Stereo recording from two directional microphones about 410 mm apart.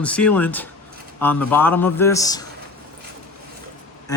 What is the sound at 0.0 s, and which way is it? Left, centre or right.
A man's voice, centre.